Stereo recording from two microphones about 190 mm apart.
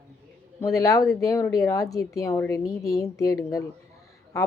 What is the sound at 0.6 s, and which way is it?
Speech, 20° left (ahead or behind).